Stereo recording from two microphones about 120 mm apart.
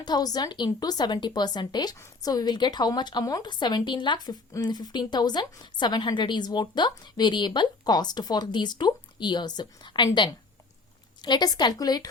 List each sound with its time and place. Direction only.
0.0 s a woman's voice: 35° left (ahead or behind)